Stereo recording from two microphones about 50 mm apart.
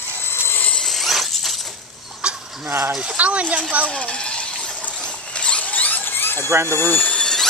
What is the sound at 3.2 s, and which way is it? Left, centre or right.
Speech, right.